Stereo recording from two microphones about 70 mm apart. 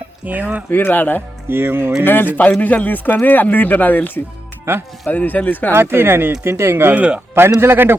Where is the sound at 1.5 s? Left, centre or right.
Right.